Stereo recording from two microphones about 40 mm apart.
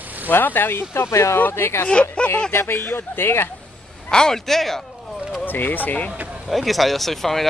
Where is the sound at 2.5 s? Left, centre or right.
Left.